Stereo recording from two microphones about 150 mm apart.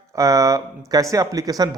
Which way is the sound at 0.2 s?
20° right (ahead or behind).